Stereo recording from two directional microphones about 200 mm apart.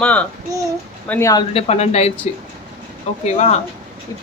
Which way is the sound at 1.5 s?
30° left (ahead or behind).